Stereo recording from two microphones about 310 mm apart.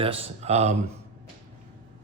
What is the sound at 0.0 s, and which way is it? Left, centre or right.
Speech, centre.